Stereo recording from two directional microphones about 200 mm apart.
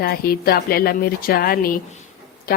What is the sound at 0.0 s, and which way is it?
Speech, 50° left (ahead or behind).